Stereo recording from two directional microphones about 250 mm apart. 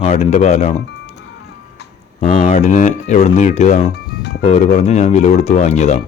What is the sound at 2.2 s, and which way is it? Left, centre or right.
A man's voice, left.